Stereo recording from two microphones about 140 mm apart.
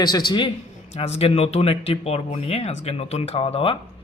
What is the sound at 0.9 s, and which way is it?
A man's voice, 50° left (ahead or behind).